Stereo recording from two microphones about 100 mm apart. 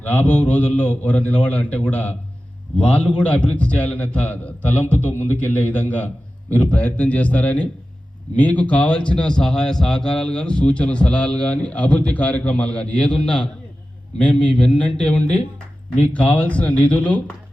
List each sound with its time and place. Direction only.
0.0 s a man's voice: 15° left (ahead or behind)